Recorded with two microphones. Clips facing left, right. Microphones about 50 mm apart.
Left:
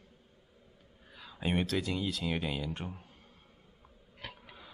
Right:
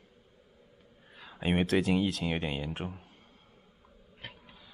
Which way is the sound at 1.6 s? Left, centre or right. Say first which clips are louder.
Right 6 dB; right.